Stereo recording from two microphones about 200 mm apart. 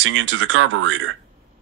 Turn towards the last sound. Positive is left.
turn(degrees=-80)